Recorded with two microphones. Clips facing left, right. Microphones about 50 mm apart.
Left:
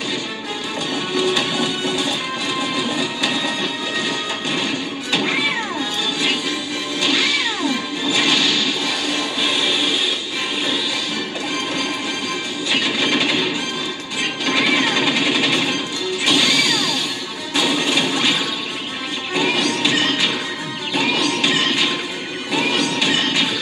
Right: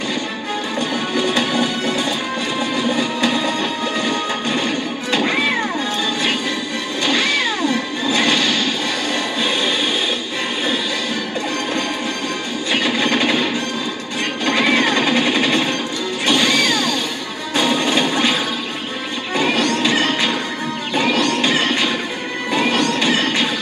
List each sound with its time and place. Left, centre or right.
1.1 s music: right
2.9 s music: right
5.1 s music: right
7.0 s music: right
13.1 s music: right
14.7 s music: right
16.3 s smash: right
17.7 s music: right